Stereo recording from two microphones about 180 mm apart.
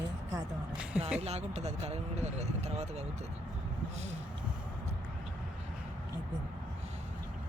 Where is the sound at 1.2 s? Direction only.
35° right (ahead or behind).